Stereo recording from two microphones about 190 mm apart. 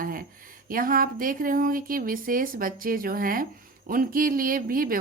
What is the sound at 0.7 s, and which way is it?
A woman's voice, 50° right (ahead or behind).